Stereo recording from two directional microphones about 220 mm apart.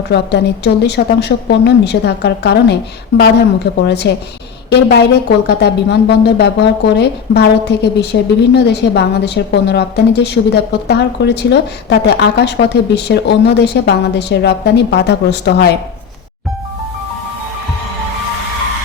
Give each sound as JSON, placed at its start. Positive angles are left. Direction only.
{"t": 0.1, "sound": "speech", "side_deg": 50}